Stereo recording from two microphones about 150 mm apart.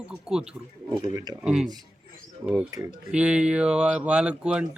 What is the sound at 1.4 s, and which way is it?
Speech, 5° right (ahead or behind).